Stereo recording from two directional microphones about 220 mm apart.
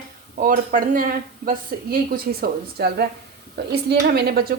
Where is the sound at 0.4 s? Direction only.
40° right (ahead or behind).